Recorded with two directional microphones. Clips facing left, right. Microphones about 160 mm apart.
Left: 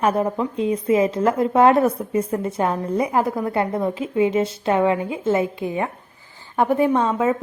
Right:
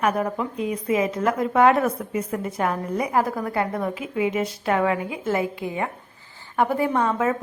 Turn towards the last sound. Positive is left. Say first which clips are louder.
# left 3 dB
turn(degrees=20)  # may be behind; listen again after turning